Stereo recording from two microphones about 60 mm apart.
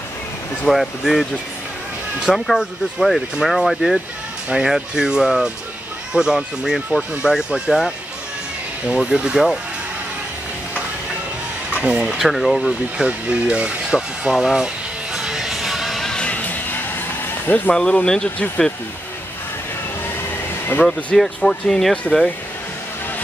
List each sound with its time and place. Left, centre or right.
0.7 s speech: centre
2.2 s speech: centre
8.8 s speech: centre
11.8 s speech: centre
12.2 s speech: centre
12.6 s speech: centre
15.1 s music: centre
16.1 s music: centre; by 17.6 s left
17.7 s speech: centre
20.2 s vehicle: left
21.4 s speech: centre